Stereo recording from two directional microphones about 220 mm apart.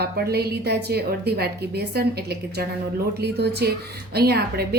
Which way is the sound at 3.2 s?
50° right (ahead or behind).